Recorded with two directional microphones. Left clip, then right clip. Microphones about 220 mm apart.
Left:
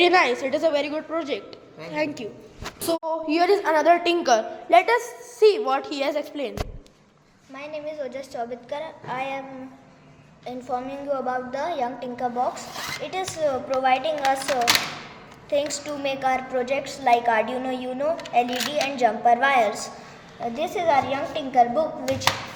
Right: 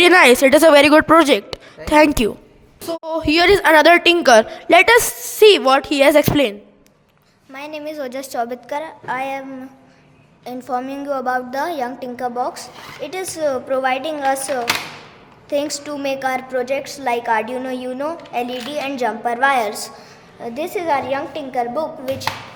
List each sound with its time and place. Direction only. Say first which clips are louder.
0.0 s a woman's voice: right 9 dB; 50° right (ahead or behind)
7.5 s a woman's voice: right 4 dB; 55° right (ahead or behind)
10.4 s a woman's voice: right 5 dB; 45° right (ahead or behind)
15.8 s a woman's voice: right 4 dB; 40° right (ahead or behind)